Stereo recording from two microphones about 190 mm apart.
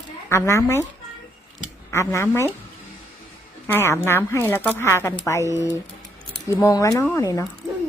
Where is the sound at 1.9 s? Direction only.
15° left (ahead or behind).